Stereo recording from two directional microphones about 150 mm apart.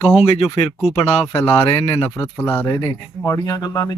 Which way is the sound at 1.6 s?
40° left (ahead or behind).